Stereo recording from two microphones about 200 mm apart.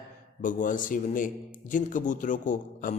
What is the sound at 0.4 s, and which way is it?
A man's voice, 40° left (ahead or behind).